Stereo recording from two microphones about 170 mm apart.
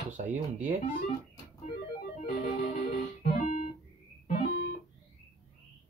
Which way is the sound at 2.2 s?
60° left (ahead or behind).